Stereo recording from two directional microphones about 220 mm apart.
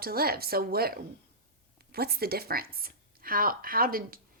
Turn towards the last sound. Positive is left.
turn(degrees=-40)  # may be behind; listen again after turning